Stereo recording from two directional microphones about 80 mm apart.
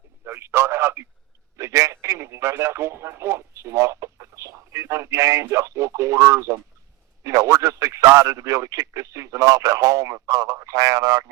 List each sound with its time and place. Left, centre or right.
0.3 s radio: right
1.5 s speech: right